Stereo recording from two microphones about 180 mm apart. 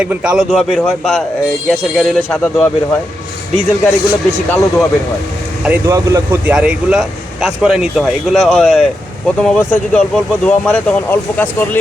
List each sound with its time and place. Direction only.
0.0 s speech: 5° right (ahead or behind); by 4.9 s 10° left (ahead or behind)
5.8 s speech: 15° right (ahead or behind)
6.5 s speech: 5° right (ahead or behind); by 11.8 s 10° left (ahead or behind)